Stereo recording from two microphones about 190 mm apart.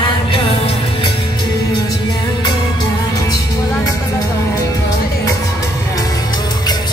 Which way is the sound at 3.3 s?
15° left (ahead or behind).